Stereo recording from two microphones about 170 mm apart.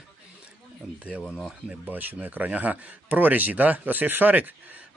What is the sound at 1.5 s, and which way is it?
A man's voice, 5° right (ahead or behind).